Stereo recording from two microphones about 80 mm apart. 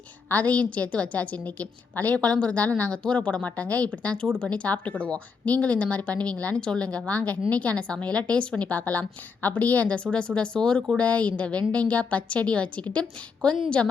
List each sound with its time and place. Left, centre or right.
0.3 s a woman's voice: centre